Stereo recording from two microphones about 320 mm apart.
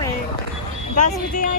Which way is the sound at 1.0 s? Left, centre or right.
Left.